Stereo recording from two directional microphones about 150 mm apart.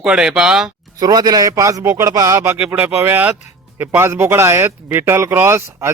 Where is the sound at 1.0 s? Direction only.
25° right (ahead or behind).